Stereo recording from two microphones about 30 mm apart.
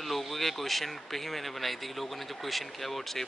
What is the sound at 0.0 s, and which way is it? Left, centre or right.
Speech, centre.